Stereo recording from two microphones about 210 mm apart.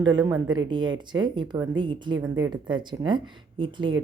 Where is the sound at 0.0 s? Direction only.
20° right (ahead or behind).